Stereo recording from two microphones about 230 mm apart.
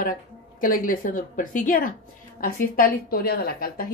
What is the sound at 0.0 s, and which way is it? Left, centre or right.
Speech, left.